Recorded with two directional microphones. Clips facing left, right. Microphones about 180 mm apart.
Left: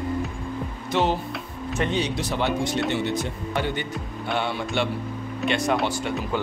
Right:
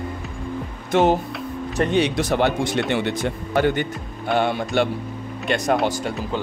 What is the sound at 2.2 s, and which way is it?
Speech, 60° right (ahead or behind).